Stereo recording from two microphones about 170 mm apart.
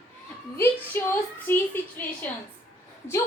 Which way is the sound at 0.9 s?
15° left (ahead or behind).